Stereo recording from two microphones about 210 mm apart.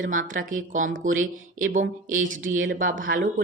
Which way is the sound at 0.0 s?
40° right (ahead or behind).